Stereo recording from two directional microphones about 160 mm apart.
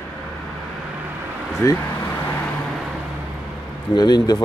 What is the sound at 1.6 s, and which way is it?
Speech, 20° left (ahead or behind).